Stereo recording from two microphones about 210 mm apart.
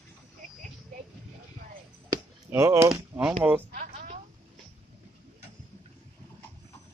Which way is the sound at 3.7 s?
35° right (ahead or behind).